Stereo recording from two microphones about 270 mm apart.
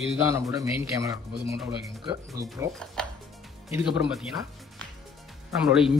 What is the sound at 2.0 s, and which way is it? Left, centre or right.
Speech, centre.